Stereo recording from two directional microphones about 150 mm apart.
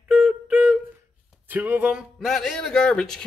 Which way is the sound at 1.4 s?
10° right (ahead or behind).